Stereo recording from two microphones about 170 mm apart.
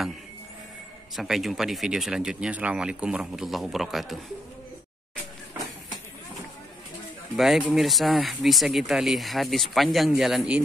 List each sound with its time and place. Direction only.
1.1 s speech: centre (ahead or behind)
7.3 s speech: centre (ahead or behind)